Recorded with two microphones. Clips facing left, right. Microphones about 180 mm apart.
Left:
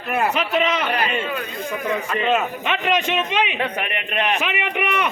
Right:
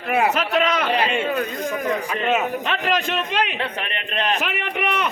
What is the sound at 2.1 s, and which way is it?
A man's voice, 5° right (ahead or behind).